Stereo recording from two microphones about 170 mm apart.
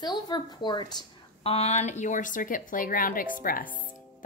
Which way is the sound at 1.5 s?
40° left (ahead or behind).